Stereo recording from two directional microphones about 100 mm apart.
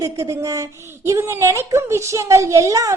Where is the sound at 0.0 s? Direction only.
30° right (ahead or behind).